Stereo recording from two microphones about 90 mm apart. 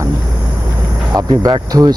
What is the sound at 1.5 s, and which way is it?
Speech, 45° right (ahead or behind).